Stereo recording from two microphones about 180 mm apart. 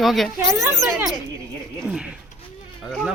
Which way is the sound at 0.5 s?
15° right (ahead or behind).